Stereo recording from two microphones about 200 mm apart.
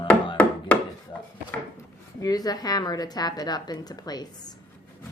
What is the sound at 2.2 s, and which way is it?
A woman's voice, 20° left (ahead or behind).